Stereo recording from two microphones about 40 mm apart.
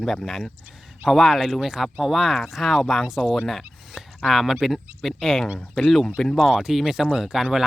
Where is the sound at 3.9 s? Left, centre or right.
Centre.